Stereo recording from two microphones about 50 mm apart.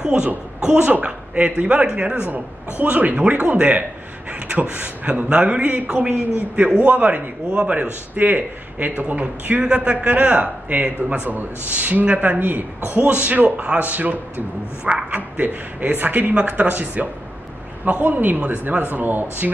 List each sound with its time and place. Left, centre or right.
0.0 s a woman's voice: centre
2.3 s a man's voice: right